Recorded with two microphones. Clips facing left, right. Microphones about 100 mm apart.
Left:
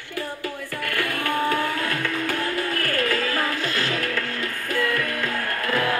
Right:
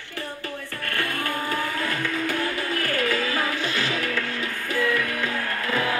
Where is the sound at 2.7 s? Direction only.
45° left (ahead or behind).